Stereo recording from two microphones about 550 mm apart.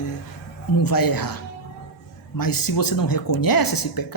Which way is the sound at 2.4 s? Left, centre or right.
Left.